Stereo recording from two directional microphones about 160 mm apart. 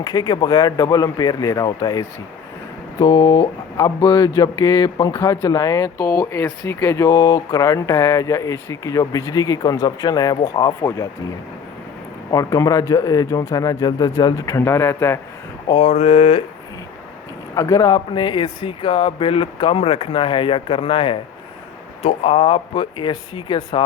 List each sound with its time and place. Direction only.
0.0 s speech: 25° left (ahead or behind)
6.1 s speech: 5° left (ahead or behind)
12.3 s speech: 20° left (ahead or behind)
15.7 s speech: 45° left (ahead or behind)
17.5 s speech: 20° left (ahead or behind)